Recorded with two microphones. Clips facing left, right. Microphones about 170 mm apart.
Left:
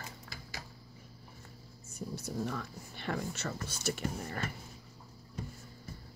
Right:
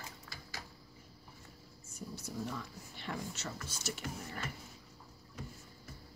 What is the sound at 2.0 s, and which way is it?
Speech, 60° left (ahead or behind).